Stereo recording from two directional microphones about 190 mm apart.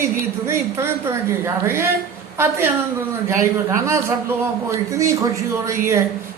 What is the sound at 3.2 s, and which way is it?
A man's voice, 15° right (ahead or behind).